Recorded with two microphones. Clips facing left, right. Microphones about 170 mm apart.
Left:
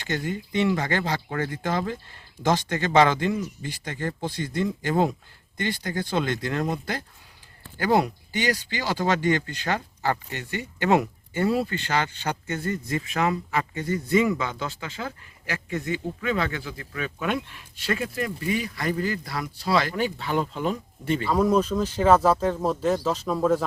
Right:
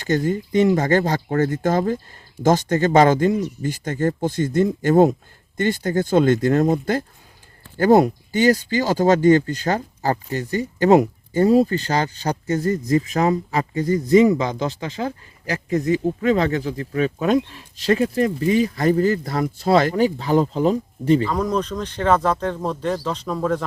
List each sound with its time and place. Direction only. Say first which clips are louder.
0.0 s speech: right 9 dB; 40° right (ahead or behind)
21.2 s speech: left 1 dB; 10° left (ahead or behind)